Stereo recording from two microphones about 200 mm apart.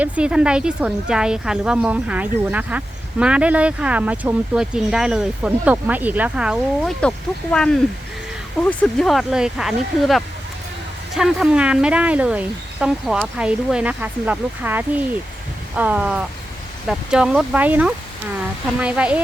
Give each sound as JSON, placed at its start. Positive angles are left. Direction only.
{"t": 0.0, "sound": "speech", "side_deg": -5}